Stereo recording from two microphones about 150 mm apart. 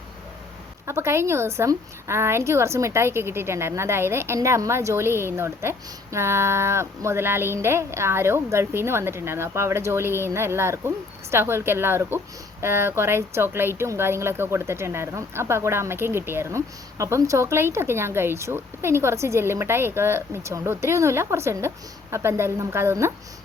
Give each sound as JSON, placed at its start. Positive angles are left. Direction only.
{"t": 0.9, "sound": "a woman's voice", "side_deg": -15}